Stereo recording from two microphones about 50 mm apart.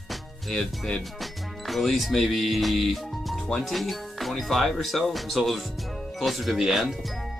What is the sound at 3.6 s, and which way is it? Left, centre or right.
Speech, centre.